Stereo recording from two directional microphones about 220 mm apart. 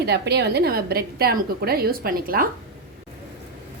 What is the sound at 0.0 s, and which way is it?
A woman's voice, 50° right (ahead or behind).